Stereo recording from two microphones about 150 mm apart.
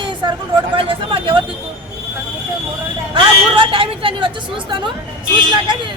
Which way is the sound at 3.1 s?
30° right (ahead or behind).